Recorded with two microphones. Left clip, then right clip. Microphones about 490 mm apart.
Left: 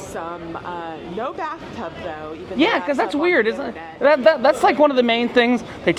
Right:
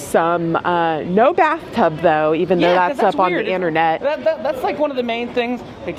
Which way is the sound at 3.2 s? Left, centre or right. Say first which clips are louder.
Even; left.